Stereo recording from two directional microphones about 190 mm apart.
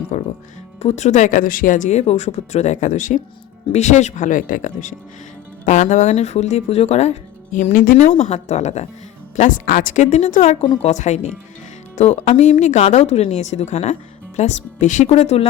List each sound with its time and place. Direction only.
0.1 s music: 40° left (ahead or behind)
0.8 s speech: 35° left (ahead or behind)